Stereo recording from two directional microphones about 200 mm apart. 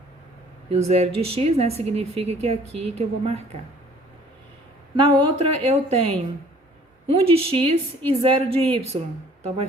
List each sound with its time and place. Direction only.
0.7 s a woman's voice: 30° right (ahead or behind)
4.9 s a woman's voice: 25° right (ahead or behind)
7.2 s a woman's voice: 30° right (ahead or behind)